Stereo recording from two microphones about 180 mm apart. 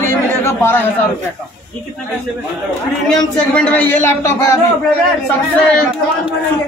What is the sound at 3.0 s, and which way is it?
A man's voice, 5° left (ahead or behind).